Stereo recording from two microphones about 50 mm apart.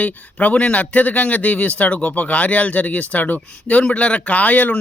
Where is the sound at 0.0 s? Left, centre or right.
Left.